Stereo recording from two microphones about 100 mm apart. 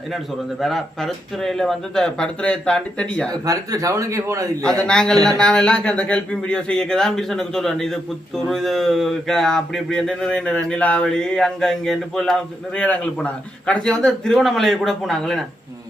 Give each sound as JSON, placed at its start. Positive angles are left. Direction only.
{"t": 0.6, "sound": "speech", "side_deg": 0}
{"t": 3.4, "sound": "speech", "side_deg": -35}
{"t": 4.8, "sound": "a man's voice", "side_deg": 10}